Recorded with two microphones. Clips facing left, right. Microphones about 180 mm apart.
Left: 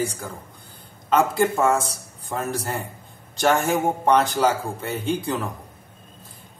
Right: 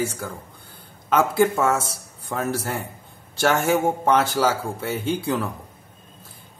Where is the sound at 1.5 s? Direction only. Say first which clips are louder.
Left 1 dB; 10° left (ahead or behind).